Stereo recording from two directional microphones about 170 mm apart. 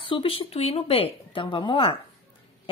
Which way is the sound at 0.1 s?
35° left (ahead or behind).